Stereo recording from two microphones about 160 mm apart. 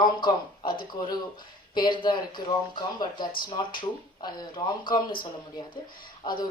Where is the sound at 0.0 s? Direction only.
30° left (ahead or behind).